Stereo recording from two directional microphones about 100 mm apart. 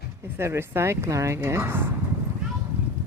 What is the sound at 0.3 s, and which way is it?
Speech, 25° right (ahead or behind).